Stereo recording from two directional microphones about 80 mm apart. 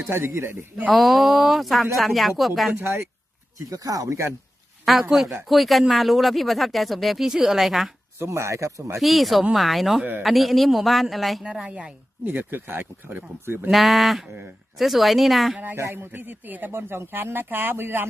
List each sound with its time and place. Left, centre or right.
0.0 s speech: right
0.9 s speech: centre
2.7 s speech: right
3.7 s speech: right
5.1 s speech: centre
8.2 s speech: right
9.0 s speech: centre
10.0 s speech: right
10.2 s speech: centre
11.4 s speech: centre
13.7 s speech: centre
15.7 s speech: right